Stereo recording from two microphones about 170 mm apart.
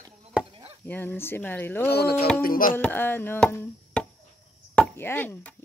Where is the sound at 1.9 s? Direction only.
70° left (ahead or behind).